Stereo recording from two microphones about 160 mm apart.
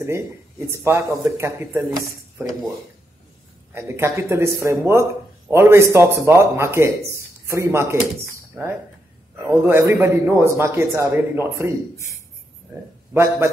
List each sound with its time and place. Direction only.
0.7 s a man's voice: 15° right (ahead or behind)
2.3 s speech: centre (ahead or behind)
3.7 s a man's voice: 15° right (ahead or behind)
9.5 s a man's voice: 15° right (ahead or behind)
13.1 s a man's voice: 15° right (ahead or behind)